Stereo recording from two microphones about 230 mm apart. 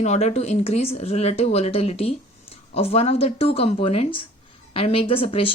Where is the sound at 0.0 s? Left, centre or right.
Left.